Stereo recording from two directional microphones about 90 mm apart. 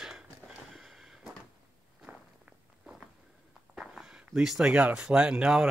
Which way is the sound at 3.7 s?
5° right (ahead or behind).